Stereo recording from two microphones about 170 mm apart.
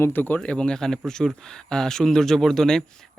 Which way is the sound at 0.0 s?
10° left (ahead or behind).